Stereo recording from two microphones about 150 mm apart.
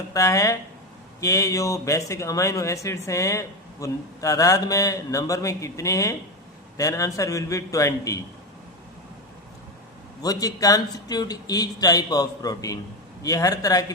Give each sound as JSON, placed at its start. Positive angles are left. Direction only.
{"t": 0.1, "sound": "speech", "side_deg": 20}
{"t": 10.2, "sound": "speech", "side_deg": 25}